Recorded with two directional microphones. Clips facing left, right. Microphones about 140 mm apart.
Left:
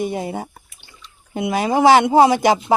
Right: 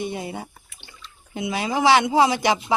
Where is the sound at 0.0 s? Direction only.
45° left (ahead or behind).